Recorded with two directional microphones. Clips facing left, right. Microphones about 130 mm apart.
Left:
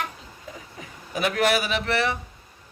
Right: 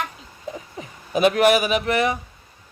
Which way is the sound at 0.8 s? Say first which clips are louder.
Right 8 dB; 20° right (ahead or behind).